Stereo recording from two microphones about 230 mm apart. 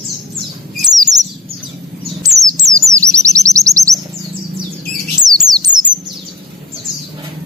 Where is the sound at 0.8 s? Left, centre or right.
Centre.